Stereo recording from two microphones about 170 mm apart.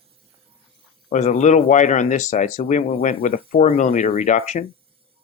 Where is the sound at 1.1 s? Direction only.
45° left (ahead or behind).